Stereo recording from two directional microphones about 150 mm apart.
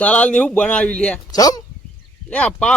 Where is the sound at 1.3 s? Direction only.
25° left (ahead or behind).